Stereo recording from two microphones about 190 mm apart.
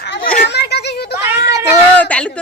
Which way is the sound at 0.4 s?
60° left (ahead or behind).